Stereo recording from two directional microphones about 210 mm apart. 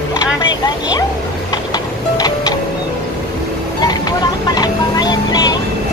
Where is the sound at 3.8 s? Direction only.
20° left (ahead or behind).